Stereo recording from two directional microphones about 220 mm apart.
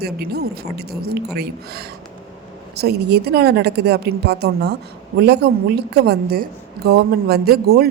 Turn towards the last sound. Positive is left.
turn(degrees=-45)  # may be behind; listen again after turning